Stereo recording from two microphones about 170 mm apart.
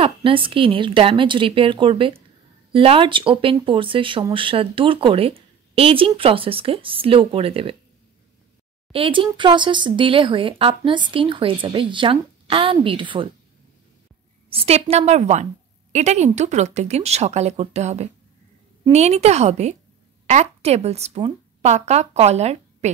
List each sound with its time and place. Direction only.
0.0 s speech: 30° right (ahead or behind)
8.9 s speech: 30° right (ahead or behind)
14.5 s a woman's voice: 35° right (ahead or behind)